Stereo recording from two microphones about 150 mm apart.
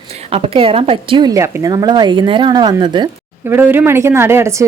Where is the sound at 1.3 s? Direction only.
20° right (ahead or behind).